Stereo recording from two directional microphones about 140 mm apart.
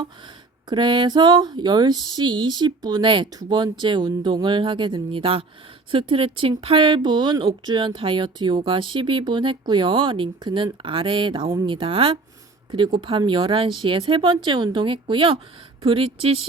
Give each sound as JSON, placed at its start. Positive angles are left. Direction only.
{"t": 0.7, "sound": "speech", "side_deg": -35}